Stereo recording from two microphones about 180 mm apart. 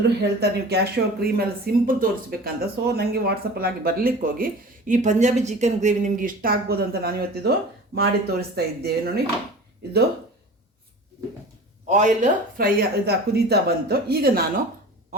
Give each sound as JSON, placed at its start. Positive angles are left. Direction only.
{"t": 0.2, "sound": "speech", "side_deg": -65}
{"t": 11.9, "sound": "speech", "side_deg": -45}